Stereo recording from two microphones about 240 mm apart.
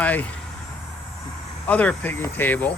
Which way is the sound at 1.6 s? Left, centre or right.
Centre.